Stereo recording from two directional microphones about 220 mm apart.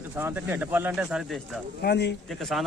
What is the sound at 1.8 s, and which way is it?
Speech, 50° left (ahead or behind).